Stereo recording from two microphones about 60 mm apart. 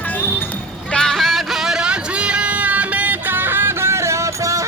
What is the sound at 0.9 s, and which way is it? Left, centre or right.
Music, centre.